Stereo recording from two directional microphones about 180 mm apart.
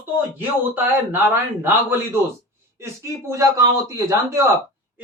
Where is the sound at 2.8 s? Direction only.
15° right (ahead or behind).